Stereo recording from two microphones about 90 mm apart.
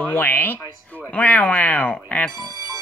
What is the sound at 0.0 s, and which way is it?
Speech, 20° left (ahead or behind).